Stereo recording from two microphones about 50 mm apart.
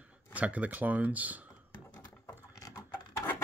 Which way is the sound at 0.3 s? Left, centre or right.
Right.